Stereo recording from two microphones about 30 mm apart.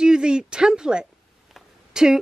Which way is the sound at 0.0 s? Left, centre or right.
Right.